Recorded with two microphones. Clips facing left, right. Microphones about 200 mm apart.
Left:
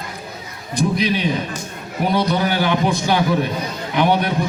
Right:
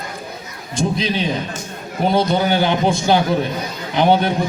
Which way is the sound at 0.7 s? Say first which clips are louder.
Left 1 dB; 25° right (ahead or behind).